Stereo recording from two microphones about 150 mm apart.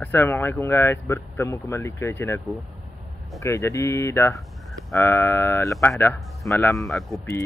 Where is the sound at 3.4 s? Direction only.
20° left (ahead or behind).